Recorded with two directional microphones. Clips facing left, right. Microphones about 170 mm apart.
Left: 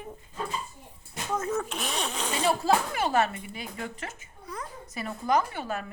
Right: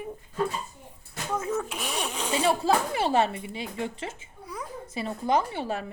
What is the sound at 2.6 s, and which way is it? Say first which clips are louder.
Speech: right 1 dB; 30° right (ahead or behind).